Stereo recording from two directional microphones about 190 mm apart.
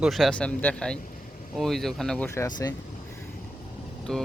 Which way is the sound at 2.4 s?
20° left (ahead or behind).